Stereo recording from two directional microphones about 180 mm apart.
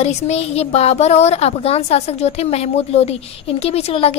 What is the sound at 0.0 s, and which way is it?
Speech, 35° left (ahead or behind).